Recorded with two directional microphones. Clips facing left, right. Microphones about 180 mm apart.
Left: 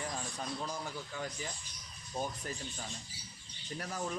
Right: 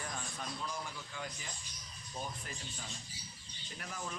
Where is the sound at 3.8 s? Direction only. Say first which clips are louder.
Left 5 dB; 40° left (ahead or behind).